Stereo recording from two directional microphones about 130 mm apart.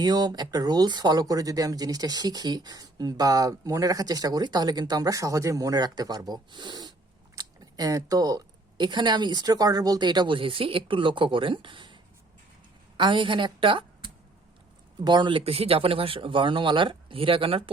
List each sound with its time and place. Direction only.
0.0 s speech: 30° right (ahead or behind)
13.0 s a woman's voice: 40° right (ahead or behind)